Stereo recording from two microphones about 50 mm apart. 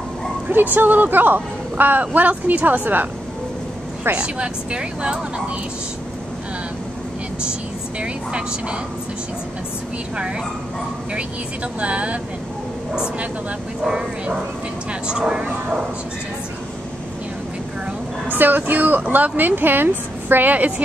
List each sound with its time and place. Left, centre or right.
0.5 s a woman's voice: right
4.1 s speech: right
8.0 s speech: right
11.1 s speech: right
13.8 s speech: centre
18.3 s a woman's voice: right